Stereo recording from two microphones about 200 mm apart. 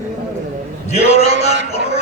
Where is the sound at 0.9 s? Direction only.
30° left (ahead or behind).